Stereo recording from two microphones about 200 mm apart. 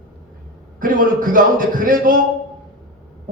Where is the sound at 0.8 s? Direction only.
45° right (ahead or behind).